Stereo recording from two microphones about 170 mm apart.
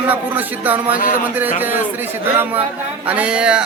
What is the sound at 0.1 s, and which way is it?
Speech, 10° right (ahead or behind).